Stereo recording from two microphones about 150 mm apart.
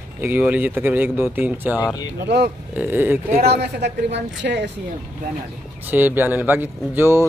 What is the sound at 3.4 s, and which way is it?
A woman's voice, 90° right.